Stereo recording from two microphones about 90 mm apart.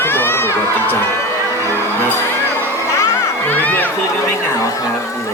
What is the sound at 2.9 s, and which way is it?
Crowd, 35° left (ahead or behind).